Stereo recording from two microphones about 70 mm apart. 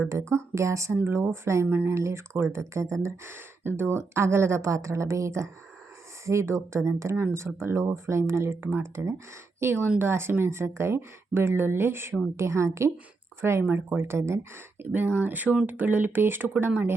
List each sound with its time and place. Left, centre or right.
0.1 s speech: right
1.0 s speech: right
1.6 s speech: right
1.9 s speech: right
14.9 s speech: right